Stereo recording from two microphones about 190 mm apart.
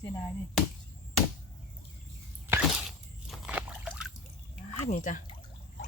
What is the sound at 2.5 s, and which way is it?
Walk, 5° right (ahead or behind).